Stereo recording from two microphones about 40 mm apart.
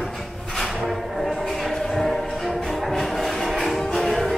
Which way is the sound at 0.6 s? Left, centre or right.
Centre.